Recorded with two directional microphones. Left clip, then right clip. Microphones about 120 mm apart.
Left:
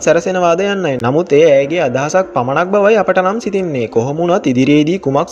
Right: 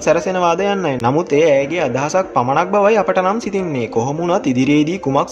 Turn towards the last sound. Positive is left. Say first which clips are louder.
# left 3 dB
turn(degrees=35)  # may be behind; listen again after turning